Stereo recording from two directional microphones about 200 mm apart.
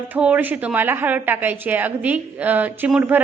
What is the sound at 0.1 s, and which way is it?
A woman's voice, 5° right (ahead or behind).